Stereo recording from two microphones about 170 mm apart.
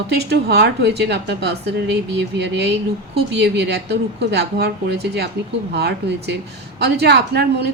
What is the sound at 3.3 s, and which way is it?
A woman's voice, 90° right.